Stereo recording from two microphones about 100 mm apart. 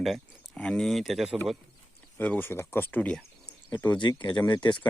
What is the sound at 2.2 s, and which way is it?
Speech, 20° left (ahead or behind).